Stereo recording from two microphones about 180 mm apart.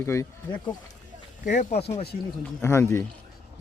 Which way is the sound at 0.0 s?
15° left (ahead or behind).